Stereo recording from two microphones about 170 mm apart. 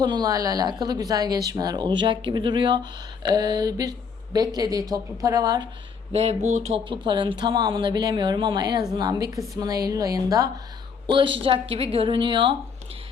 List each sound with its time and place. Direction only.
0.0 s a woman's voice: 25° right (ahead or behind)
6.1 s a woman's voice: 40° right (ahead or behind)